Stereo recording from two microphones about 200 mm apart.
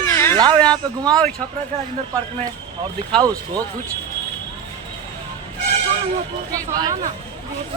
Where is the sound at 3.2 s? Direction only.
15° right (ahead or behind).